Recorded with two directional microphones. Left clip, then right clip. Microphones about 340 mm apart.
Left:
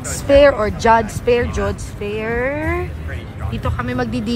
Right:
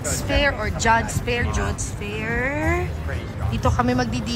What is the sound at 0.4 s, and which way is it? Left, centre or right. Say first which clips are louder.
Speech: left 10 dB; centre.